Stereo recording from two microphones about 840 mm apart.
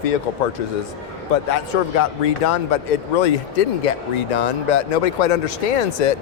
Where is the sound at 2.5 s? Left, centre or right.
Left.